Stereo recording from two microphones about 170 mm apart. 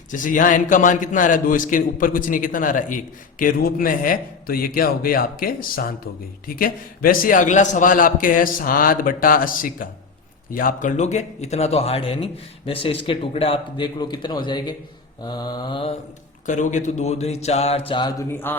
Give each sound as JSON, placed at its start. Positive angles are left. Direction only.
{"t": 0.1, "sound": "a man's voice", "side_deg": 50}
{"t": 16.5, "sound": "speech", "side_deg": 45}
{"t": 18.3, "sound": "speech", "side_deg": 10}